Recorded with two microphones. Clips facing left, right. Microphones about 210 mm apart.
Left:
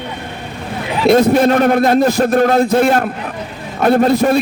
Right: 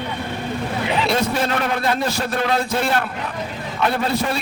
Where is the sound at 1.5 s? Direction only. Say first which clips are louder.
Left 10 dB; 45° left (ahead or behind).